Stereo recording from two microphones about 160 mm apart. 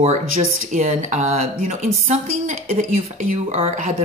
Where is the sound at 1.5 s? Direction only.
55° right (ahead or behind).